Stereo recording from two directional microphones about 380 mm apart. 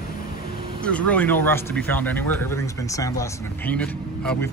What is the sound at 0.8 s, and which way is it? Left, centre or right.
Speech, centre.